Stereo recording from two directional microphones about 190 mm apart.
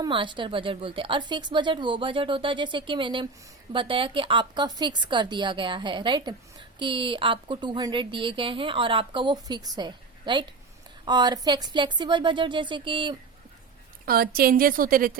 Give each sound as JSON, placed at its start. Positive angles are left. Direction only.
{"t": 0.0, "sound": "a woman's voice", "side_deg": -25}
{"t": 14.0, "sound": "a woman's voice", "side_deg": -50}